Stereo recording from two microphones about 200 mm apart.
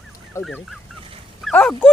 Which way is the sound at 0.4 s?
15° left (ahead or behind).